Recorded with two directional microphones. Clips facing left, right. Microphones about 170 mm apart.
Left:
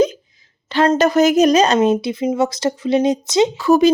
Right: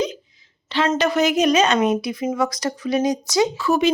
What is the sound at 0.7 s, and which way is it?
Speech, 45° left (ahead or behind).